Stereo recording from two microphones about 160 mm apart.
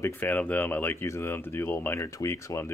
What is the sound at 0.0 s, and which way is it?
Speech, 10° left (ahead or behind).